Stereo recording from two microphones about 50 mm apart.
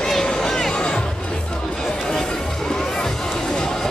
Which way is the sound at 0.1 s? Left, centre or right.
Centre.